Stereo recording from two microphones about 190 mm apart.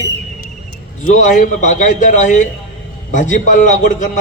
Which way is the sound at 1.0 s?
45° left (ahead or behind).